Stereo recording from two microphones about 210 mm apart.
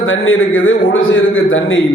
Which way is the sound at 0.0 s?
70° left (ahead or behind).